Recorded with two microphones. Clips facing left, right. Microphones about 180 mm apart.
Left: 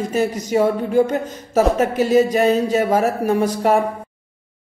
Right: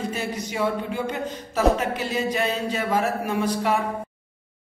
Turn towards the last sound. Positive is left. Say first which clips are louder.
# left 7 dB
turn(degrees=45)  # may be behind; listen again after turning